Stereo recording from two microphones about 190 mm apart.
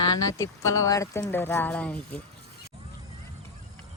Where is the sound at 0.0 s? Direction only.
20° left (ahead or behind).